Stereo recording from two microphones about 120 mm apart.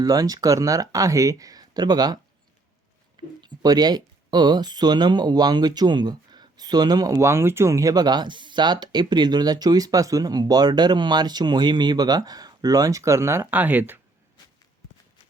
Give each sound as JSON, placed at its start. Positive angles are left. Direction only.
{"t": 0.0, "sound": "speech", "side_deg": -30}
{"t": 3.4, "sound": "speech", "side_deg": -35}